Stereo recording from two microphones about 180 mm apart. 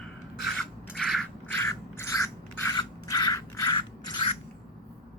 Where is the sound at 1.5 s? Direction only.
15° left (ahead or behind).